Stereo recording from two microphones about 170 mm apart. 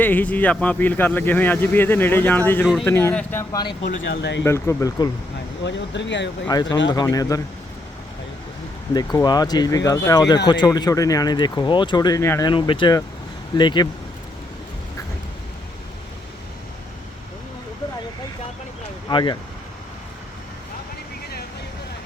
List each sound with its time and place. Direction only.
0.0 s speech: 10° left (ahead or behind)
4.0 s speech: 90° left
4.4 s speech: 15° left (ahead or behind)
5.6 s speech: 90° left
6.5 s speech: 25° left (ahead or behind)
8.9 s speech: 25° left (ahead or behind)
19.0 s speech: 25° left (ahead or behind)